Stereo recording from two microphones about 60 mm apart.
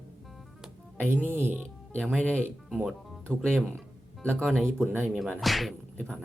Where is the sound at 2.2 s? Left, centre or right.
Left.